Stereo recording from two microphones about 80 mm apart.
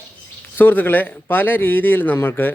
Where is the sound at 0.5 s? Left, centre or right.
Left.